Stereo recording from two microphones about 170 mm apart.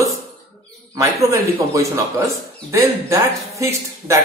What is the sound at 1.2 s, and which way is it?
A man's voice, 15° right (ahead or behind).